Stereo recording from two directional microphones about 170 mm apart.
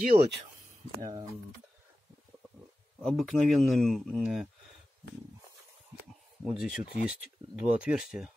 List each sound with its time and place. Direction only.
0.1 s speech: 35° right (ahead or behind)
3.0 s speech: centre (ahead or behind)
6.4 s speech: 5° right (ahead or behind)